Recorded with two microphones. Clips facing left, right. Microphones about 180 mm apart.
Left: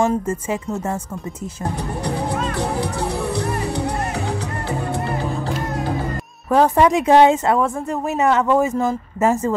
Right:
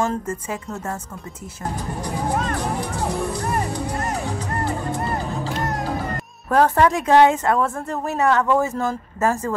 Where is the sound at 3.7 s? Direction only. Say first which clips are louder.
Left 2 dB; 65° left (ahead or behind).